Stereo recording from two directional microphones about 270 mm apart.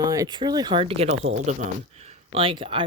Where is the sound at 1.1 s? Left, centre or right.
Right.